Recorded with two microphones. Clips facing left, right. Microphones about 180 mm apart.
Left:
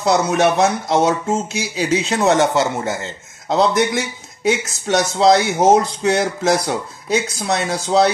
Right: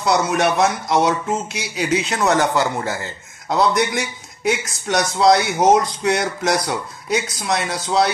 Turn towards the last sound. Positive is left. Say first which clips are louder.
# left 2 dB
turn(degrees=30)  # may be behind; listen again after turning